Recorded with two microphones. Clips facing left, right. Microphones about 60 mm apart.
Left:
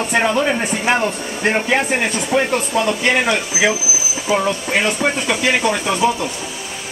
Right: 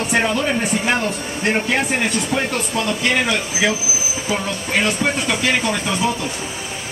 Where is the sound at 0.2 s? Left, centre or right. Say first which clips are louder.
Left 2 dB; centre.